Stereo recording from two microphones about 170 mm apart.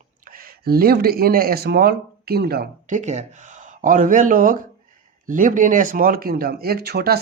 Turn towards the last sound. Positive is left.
turn(degrees=-70)  # may be behind; listen again after turning